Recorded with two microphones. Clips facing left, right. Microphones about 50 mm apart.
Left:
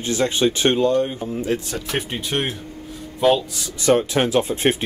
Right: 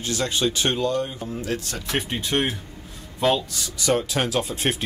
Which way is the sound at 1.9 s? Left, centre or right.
Centre.